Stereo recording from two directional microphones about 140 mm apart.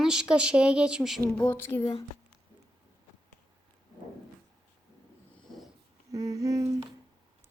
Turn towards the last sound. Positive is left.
turn(degrees=-25)  # may be behind; listen again after turning